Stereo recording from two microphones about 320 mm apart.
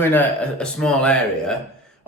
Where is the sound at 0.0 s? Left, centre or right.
Centre.